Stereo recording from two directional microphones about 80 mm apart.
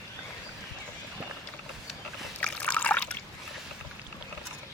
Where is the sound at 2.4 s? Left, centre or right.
Centre.